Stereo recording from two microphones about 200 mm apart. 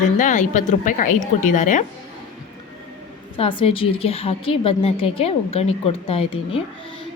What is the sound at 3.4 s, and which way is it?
A woman's voice, 25° left (ahead or behind).